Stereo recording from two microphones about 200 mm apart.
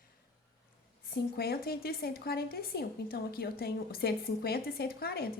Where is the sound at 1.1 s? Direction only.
50° left (ahead or behind).